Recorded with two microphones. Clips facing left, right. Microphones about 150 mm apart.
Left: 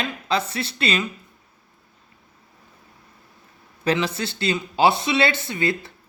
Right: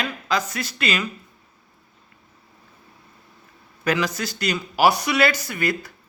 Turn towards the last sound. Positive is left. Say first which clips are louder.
# left 1 dB
turn(degrees=25)  # may be behind; listen again after turning